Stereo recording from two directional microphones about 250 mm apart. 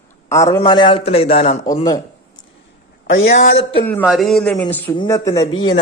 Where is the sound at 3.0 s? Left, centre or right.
Left.